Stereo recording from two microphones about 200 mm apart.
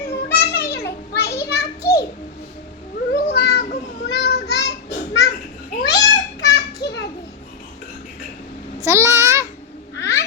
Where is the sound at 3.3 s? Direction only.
55° left (ahead or behind).